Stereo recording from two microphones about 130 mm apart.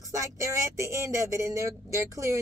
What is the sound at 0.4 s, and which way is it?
A woman's voice, 25° right (ahead or behind).